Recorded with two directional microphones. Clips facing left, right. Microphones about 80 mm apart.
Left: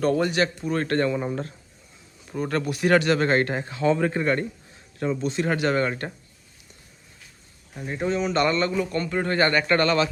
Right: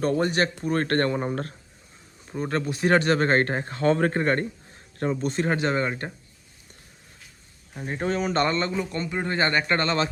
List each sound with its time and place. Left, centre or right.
0.2 s speech: right
2.3 s speech: right
5.5 s a man's voice: right
7.9 s a man's voice: right